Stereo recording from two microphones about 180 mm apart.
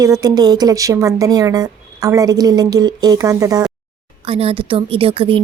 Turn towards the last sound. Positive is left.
turn(degrees=-30)  # may be behind; listen again after turning